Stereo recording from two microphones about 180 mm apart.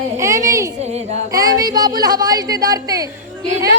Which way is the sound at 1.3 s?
20° right (ahead or behind).